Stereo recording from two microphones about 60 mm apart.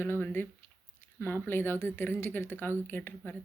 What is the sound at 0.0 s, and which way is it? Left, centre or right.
Speech, left.